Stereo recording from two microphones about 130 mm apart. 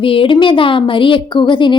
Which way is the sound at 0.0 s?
45° left (ahead or behind).